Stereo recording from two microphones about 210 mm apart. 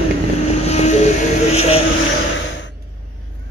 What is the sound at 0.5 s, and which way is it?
Vehicle, 30° left (ahead or behind).